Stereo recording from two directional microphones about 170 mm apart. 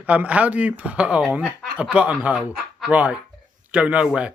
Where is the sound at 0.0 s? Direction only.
10° right (ahead or behind).